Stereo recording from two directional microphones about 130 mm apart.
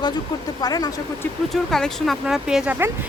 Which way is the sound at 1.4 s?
5° left (ahead or behind).